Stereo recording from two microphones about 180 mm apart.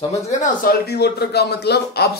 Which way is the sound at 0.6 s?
60° left (ahead or behind).